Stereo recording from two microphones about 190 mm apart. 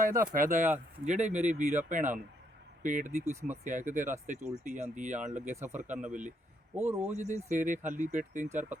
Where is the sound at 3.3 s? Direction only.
15° right (ahead or behind).